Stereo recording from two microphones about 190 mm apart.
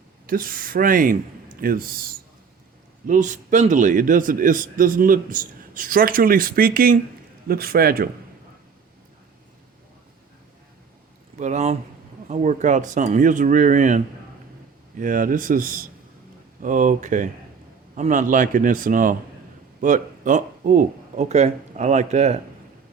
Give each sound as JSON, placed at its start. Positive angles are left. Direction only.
{"t": 0.3, "sound": "a man's voice", "side_deg": -50}
{"t": 3.1, "sound": "a man's voice", "side_deg": -40}
{"t": 11.3, "sound": "a man's voice", "side_deg": -40}